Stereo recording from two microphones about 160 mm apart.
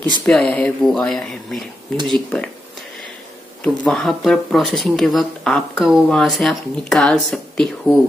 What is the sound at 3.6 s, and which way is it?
Speech, 5° left (ahead or behind).